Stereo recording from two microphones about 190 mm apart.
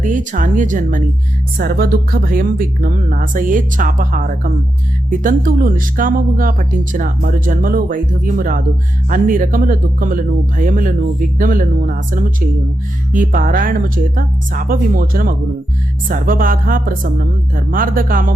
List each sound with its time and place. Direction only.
0.0 s speech: 40° right (ahead or behind)